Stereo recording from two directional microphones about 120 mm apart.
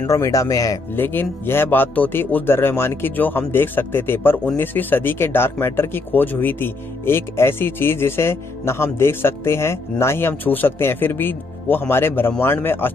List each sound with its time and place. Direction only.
0.0 s speech: 25° left (ahead or behind)
0.9 s a man's voice: 15° left (ahead or behind)